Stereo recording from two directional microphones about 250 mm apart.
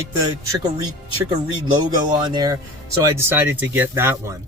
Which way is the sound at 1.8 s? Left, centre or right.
Centre.